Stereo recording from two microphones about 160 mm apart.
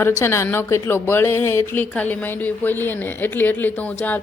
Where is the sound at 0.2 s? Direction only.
15° left (ahead or behind).